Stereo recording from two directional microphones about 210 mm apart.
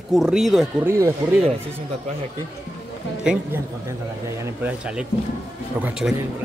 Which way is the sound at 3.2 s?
5° right (ahead or behind).